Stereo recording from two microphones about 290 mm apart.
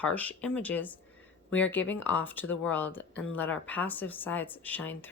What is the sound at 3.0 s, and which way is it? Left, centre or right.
Speech, left.